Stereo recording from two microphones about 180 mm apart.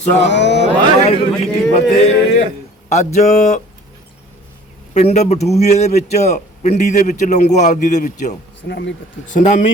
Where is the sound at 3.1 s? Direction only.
40° left (ahead or behind).